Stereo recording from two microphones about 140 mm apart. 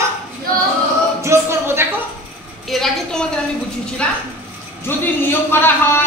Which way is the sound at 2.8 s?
5° left (ahead or behind).